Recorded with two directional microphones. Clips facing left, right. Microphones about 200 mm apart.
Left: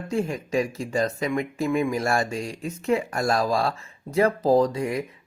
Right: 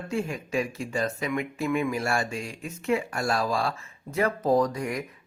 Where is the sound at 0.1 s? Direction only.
40° left (ahead or behind).